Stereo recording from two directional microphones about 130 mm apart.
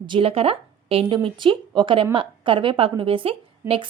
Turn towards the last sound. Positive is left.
turn(degrees=-45)  # may be behind; listen again after turning